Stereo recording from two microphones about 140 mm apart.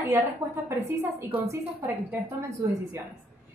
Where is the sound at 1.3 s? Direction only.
15° right (ahead or behind).